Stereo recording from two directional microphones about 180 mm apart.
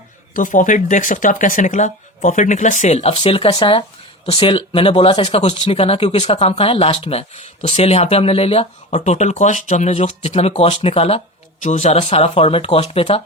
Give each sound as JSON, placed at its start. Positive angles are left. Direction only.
{"t": 0.3, "sound": "speech", "side_deg": 45}